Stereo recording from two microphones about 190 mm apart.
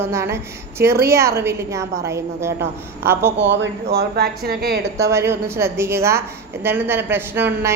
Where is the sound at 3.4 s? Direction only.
65° right (ahead or behind).